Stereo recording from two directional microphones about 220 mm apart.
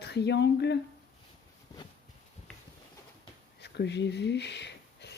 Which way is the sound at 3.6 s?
50° left (ahead or behind).